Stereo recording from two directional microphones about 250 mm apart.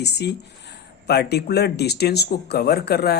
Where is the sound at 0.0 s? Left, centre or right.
Left.